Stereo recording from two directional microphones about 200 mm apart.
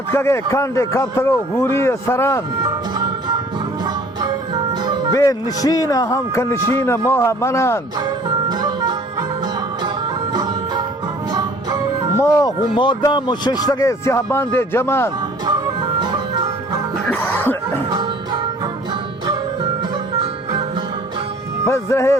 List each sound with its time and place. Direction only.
0.1 s speech: 15° left (ahead or behind)
3.0 s music: 20° right (ahead or behind)
5.1 s speech: 15° left (ahead or behind)
8.4 s music: 20° right (ahead or behind)
12.2 s speech: 15° left (ahead or behind)
16.0 s music: 20° right (ahead or behind)
17.1 s music: 5° left (ahead or behind)
21.7 s speech: 15° left (ahead or behind)